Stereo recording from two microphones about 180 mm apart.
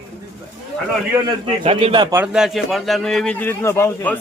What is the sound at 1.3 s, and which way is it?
Speech, 30° right (ahead or behind).